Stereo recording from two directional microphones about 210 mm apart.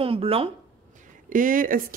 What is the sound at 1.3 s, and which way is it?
Speech, 40° right (ahead or behind).